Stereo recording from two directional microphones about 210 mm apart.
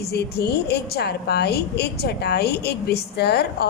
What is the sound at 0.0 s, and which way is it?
A woman's voice, 50° left (ahead or behind).